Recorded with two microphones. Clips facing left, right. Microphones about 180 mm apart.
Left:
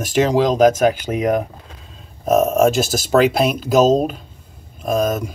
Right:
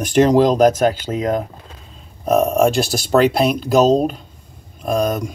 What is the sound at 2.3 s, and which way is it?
Speech, 5° left (ahead or behind).